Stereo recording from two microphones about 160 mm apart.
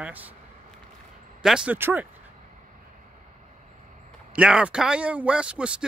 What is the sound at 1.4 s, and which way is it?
Speech, 5° right (ahead or behind).